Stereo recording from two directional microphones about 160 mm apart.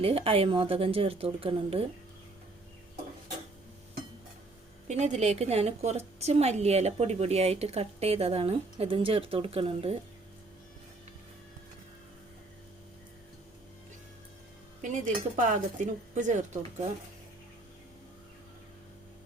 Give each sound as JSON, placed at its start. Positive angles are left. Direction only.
{"t": 0.0, "sound": "speech", "side_deg": -35}
{"t": 4.9, "sound": "speech", "side_deg": -45}
{"t": 14.8, "sound": "speech", "side_deg": -55}